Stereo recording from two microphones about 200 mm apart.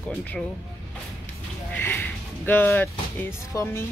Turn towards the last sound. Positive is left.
turn(degrees=10)  # may be behind; listen again after turning